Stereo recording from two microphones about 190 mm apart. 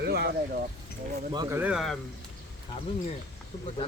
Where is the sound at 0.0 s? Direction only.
60° right (ahead or behind).